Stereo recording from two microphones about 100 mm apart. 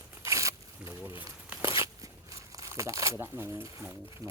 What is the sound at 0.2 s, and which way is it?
Zipper, 30° right (ahead or behind).